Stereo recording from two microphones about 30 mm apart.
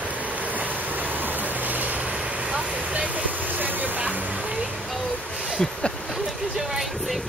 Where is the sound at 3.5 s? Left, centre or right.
Right.